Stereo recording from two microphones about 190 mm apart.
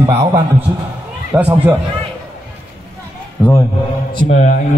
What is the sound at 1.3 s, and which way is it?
Speech, 10° right (ahead or behind).